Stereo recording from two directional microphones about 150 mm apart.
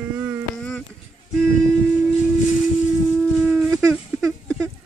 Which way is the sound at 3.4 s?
20° right (ahead or behind).